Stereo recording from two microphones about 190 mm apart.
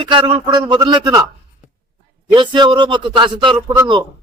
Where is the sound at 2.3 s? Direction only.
25° right (ahead or behind).